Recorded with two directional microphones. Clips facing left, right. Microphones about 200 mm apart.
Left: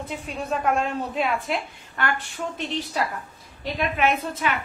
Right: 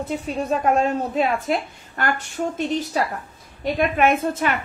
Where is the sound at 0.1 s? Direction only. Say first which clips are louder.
Right 5 dB; 40° right (ahead or behind).